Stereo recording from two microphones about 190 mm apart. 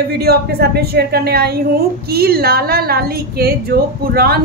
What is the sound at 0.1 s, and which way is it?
A woman's voice, 55° right (ahead or behind).